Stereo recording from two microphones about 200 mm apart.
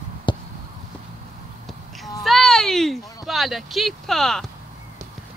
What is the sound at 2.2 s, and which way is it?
Speech, centre (ahead or behind).